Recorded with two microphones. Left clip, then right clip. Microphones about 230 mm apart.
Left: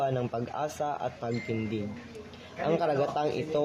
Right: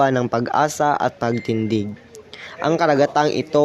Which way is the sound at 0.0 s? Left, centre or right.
Right.